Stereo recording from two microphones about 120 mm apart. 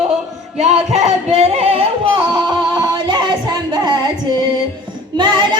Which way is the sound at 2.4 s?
35° right (ahead or behind).